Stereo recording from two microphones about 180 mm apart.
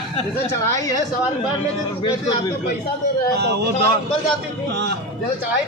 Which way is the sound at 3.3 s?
70° right (ahead or behind).